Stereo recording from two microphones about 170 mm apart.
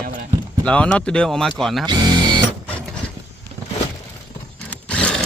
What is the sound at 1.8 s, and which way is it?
Music, 25° right (ahead or behind).